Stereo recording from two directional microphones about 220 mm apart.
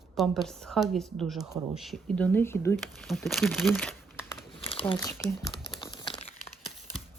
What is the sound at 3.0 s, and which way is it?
Speech, centre (ahead or behind).